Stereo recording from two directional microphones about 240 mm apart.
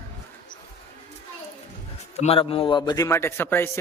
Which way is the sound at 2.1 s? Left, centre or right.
Left.